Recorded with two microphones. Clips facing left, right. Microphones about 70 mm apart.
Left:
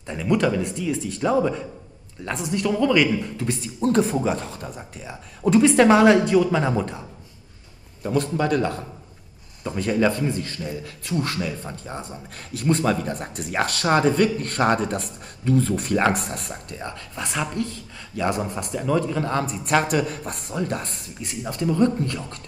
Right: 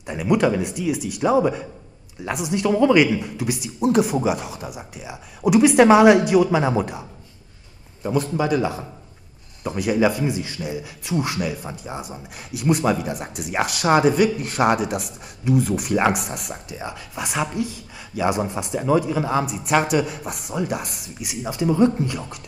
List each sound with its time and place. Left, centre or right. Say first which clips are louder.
0.0 s a man's voice: right 2 dB; centre